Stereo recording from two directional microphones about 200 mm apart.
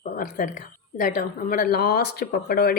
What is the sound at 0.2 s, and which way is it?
Speech, 40° left (ahead or behind).